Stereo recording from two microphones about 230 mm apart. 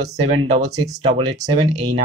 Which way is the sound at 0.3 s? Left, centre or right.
Right.